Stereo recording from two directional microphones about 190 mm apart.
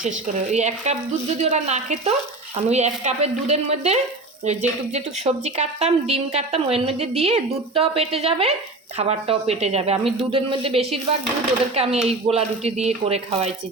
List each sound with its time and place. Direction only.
0.5 s a woman's voice: 35° right (ahead or behind)